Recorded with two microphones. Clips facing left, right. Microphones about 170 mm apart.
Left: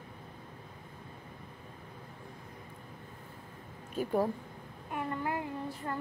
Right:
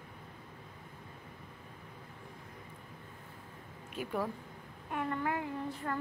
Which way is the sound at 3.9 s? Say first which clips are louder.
Left 6 dB; 40° left (ahead or behind).